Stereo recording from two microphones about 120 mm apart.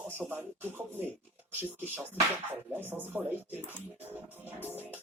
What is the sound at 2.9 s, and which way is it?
Speech, 15° right (ahead or behind).